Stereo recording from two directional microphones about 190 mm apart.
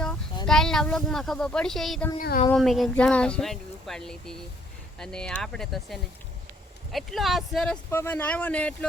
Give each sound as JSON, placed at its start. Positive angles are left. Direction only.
{"t": 0.4, "sound": "speech", "side_deg": 0}
{"t": 2.1, "sound": "speech", "side_deg": 50}
{"t": 2.5, "sound": "speech", "side_deg": 0}
{"t": 7.9, "sound": "speech", "side_deg": 10}